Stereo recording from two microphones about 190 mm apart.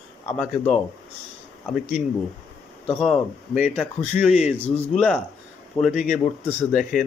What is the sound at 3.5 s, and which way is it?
A man's voice, 5° right (ahead or behind).